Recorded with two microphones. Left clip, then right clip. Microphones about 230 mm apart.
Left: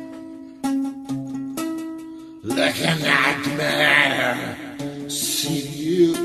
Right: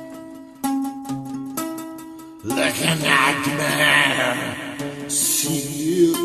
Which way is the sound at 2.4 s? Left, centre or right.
Right.